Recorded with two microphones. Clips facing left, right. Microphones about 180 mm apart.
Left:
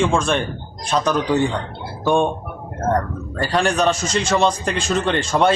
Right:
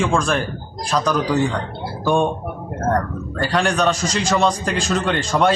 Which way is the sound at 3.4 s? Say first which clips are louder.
Even; centre (ahead or behind).